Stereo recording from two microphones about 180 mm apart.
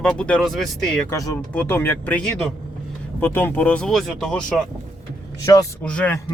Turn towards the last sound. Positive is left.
turn(degrees=10)  # may be behind; listen again after turning